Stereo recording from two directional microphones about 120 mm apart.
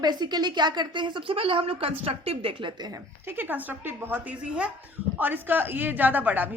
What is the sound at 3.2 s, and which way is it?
A woman's voice, 15° right (ahead or behind).